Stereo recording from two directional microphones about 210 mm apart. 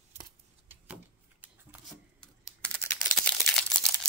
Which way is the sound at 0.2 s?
10° right (ahead or behind).